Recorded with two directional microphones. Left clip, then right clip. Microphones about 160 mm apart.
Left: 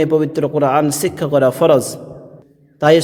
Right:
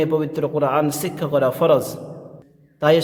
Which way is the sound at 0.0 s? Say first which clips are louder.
Left 5 dB; 40° left (ahead or behind).